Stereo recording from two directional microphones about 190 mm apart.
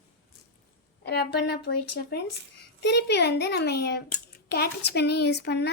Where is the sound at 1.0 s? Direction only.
60° left (ahead or behind).